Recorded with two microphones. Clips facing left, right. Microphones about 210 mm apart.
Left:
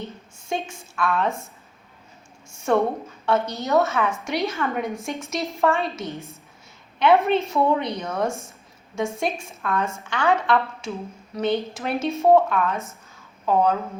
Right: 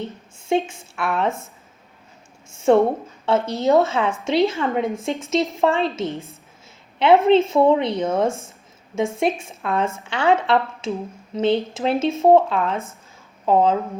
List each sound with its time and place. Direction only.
0.0 s a woman's voice: 25° right (ahead or behind)
2.6 s a woman's voice: 30° right (ahead or behind)